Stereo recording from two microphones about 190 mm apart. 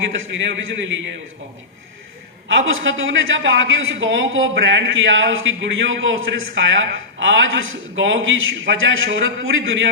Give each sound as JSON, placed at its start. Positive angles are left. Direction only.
{"t": 0.0, "sound": "a man's voice", "side_deg": -75}
{"t": 2.5, "sound": "a man's voice", "side_deg": -85}